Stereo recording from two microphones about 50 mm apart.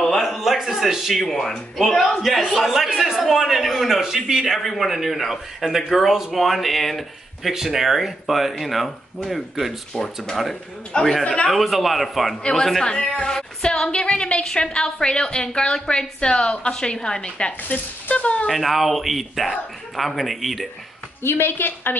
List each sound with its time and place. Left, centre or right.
0.2 s a sound: centre
1.2 s a woman's voice: centre
9.9 s a woman's voice: centre
11.5 s a man's voice: centre
12.8 s a woman's voice: centre
18.5 s a man's voice: centre
21.2 s a woman's voice: left